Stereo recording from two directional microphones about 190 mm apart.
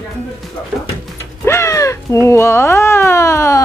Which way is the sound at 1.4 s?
15° left (ahead or behind).